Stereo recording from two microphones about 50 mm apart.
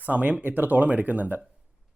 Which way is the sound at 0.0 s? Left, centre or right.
Right.